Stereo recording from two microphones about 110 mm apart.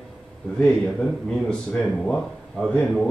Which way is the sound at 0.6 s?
5° left (ahead or behind).